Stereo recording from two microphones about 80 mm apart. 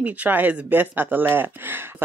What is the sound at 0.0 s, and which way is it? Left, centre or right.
Speech, centre.